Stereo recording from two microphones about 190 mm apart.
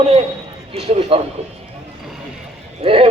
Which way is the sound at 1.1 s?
30° right (ahead or behind).